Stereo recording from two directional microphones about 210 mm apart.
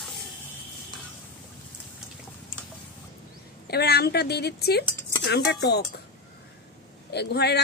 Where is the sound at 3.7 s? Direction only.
50° left (ahead or behind).